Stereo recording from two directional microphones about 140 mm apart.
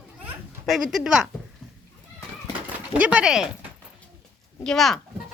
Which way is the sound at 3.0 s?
5° right (ahead or behind).